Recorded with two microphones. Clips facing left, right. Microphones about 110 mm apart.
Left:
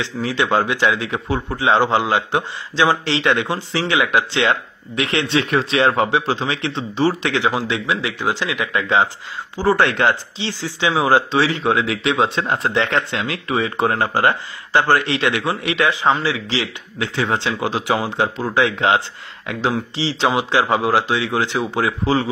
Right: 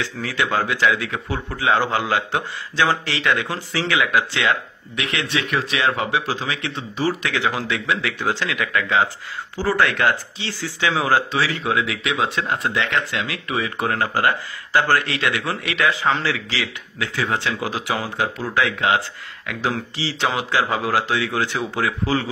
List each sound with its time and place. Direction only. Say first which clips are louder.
0.0 s speech: left 3 dB; 20° left (ahead or behind)